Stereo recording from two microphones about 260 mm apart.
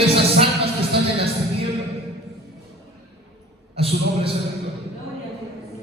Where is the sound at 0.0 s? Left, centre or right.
Right.